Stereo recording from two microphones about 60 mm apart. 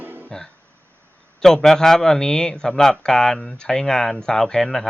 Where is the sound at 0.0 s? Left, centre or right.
Right.